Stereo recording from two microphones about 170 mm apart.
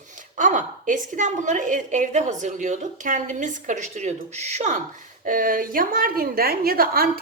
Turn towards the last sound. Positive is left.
turn(degrees=-60)  # may be behind; listen again after turning